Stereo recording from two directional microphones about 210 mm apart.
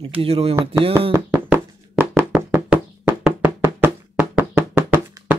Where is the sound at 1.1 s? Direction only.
10° right (ahead or behind).